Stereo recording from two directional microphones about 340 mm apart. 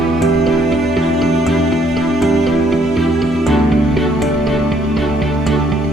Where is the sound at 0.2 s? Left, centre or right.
Centre.